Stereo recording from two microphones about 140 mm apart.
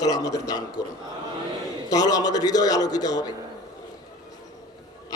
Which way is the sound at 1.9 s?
25° left (ahead or behind).